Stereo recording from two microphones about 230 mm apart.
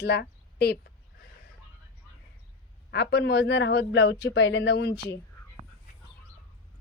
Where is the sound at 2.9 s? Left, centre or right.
Left.